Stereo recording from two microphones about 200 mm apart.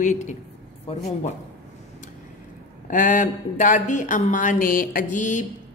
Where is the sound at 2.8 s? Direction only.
40° left (ahead or behind).